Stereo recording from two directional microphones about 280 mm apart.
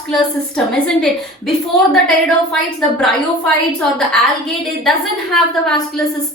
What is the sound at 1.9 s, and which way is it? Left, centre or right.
A woman's voice, centre.